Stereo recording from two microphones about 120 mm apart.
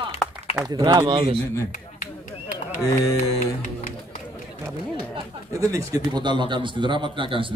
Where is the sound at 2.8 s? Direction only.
25° left (ahead or behind).